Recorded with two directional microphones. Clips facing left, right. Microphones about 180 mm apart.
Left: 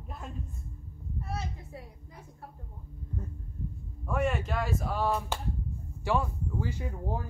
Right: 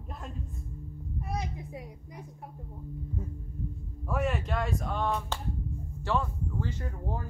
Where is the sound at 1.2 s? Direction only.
15° right (ahead or behind).